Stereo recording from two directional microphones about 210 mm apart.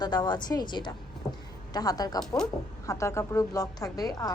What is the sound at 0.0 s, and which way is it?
A woman's voice, 20° left (ahead or behind).